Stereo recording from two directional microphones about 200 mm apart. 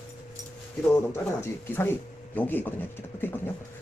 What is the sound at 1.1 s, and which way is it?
Speech, 10° left (ahead or behind).